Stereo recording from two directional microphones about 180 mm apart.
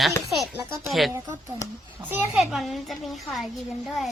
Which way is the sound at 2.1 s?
5° right (ahead or behind).